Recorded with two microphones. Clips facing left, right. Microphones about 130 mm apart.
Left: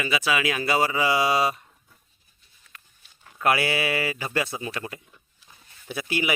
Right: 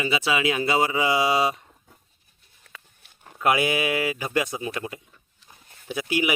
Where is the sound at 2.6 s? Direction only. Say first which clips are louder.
Right 5 dB; 55° right (ahead or behind).